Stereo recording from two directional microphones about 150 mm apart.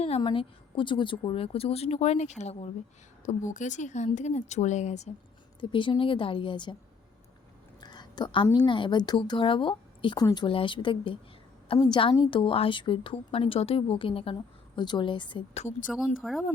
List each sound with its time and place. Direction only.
0.2 s speech: 30° left (ahead or behind)
3.2 s speech: 55° left (ahead or behind)
5.5 s speech: 30° left (ahead or behind)
7.8 s a sound: 30° left (ahead or behind)
8.4 s speech: 30° left (ahead or behind)
15.9 s speech: centre (ahead or behind)